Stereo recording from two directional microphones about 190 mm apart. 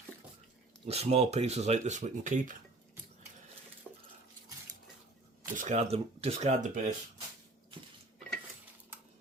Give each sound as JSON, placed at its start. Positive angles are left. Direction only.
{"t": 0.9, "sound": "speech", "side_deg": -35}
{"t": 3.9, "sound": "cutlery", "side_deg": 0}
{"t": 5.5, "sound": "speech", "side_deg": -40}